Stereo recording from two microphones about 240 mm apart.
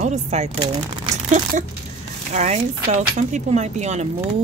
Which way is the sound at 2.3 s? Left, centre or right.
Right.